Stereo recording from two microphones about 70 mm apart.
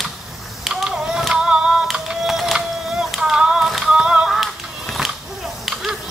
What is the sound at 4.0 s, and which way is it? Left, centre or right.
Music, centre.